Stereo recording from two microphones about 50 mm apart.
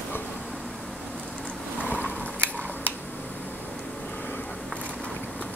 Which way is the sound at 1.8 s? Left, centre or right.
Left.